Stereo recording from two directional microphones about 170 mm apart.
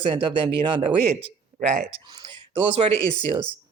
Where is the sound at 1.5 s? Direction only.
50° right (ahead or behind).